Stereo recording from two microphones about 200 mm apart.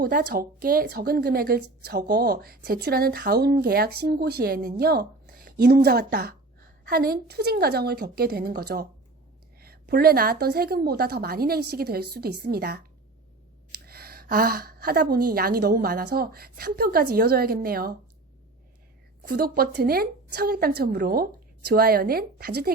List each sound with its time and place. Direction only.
0.0 s a woman's voice: 45° right (ahead or behind)
13.8 s a woman's voice: 50° right (ahead or behind)
19.2 s a woman's voice: 45° right (ahead or behind)